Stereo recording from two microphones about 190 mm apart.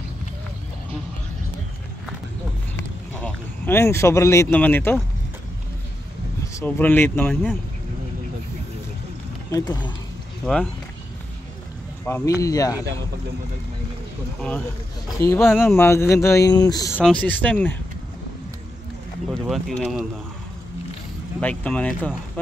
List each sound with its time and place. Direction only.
3.1 s speech: 5° left (ahead or behind)
6.4 s speech: 10° left (ahead or behind)
9.5 s speech: 25° left (ahead or behind)
10.4 s speech: 5° left (ahead or behind)
12.0 s speech: 15° left (ahead or behind)
15.2 s speech: 15° left (ahead or behind)
17.0 s speech: 5° left (ahead or behind)
19.4 s speech: centre (ahead or behind)
21.4 s speech: 5° left (ahead or behind)